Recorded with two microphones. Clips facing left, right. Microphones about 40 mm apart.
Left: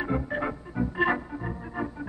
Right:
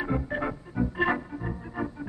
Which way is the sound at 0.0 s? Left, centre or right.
Centre.